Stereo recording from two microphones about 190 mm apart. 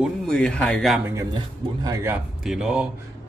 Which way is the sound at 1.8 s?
15° right (ahead or behind).